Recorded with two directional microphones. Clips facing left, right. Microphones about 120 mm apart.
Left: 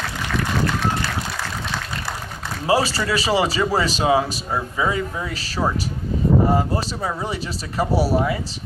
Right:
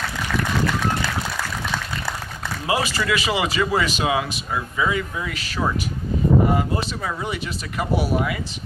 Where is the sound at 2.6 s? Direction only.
35° left (ahead or behind).